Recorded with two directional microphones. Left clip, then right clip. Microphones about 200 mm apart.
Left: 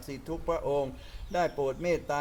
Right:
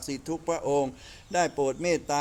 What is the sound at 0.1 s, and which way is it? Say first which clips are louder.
A man's voice: right 2 dB; 55° right (ahead or behind).